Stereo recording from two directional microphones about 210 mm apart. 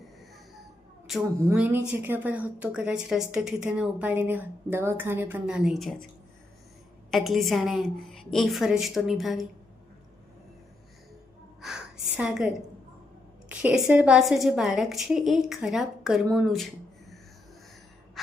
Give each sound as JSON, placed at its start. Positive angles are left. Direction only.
{"t": 1.5, "sound": "a woman's voice", "side_deg": -10}
{"t": 7.1, "sound": "a woman's voice", "side_deg": 0}
{"t": 11.6, "sound": "a sound", "side_deg": 0}
{"t": 13.5, "sound": "a woman's voice", "side_deg": -5}